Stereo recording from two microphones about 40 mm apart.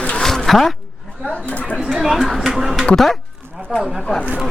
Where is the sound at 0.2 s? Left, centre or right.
Centre.